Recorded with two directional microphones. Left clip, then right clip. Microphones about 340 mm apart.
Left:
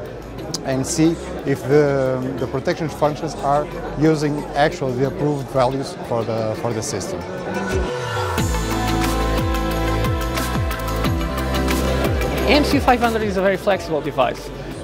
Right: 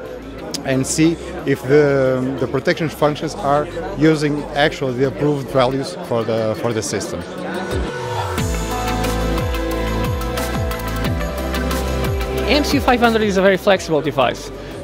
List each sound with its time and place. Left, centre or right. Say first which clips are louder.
0.7 s speech: right 2 dB; left
12.4 s speech: even; centre